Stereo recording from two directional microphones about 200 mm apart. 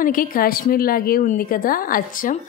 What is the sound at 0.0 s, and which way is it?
A woman's voice, 45° left (ahead or behind).